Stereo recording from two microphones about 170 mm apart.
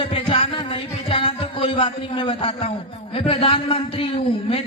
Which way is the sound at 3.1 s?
35° left (ahead or behind).